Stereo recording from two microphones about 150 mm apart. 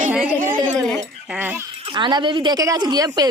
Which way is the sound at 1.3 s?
15° right (ahead or behind).